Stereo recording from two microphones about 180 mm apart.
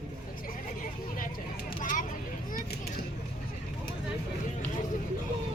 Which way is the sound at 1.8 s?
45° left (ahead or behind).